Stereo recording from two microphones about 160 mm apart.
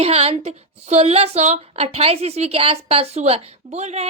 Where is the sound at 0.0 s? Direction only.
40° right (ahead or behind).